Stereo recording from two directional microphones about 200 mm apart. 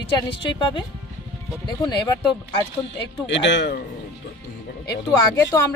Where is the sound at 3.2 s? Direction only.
60° left (ahead or behind).